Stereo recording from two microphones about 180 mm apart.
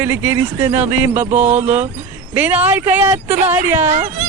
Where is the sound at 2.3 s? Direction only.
10° right (ahead or behind).